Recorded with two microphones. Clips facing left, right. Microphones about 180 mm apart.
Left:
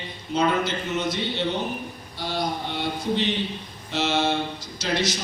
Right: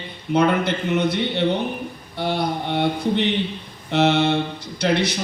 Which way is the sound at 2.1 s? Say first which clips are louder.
Right 5 dB; 60° right (ahead or behind).